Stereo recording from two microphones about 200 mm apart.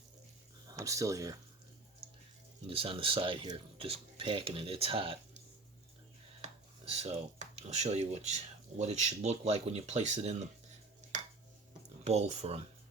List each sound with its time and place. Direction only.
0.7 s speech: 15° right (ahead or behind)
2.6 s speech: 25° right (ahead or behind)
6.4 s speech: 30° right (ahead or behind)
12.0 s speech: 35° right (ahead or behind)